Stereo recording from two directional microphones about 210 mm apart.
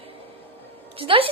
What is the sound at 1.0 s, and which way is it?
Speech, 25° right (ahead or behind).